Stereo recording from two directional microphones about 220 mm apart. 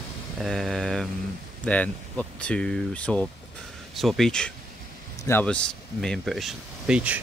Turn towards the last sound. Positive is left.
turn(degrees=-5)  # may be behind; listen again after turning